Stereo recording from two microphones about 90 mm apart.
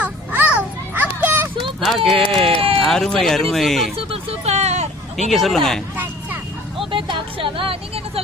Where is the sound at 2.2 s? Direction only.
10° left (ahead or behind).